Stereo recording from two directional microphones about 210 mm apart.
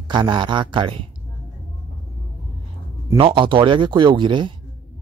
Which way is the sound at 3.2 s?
25° right (ahead or behind).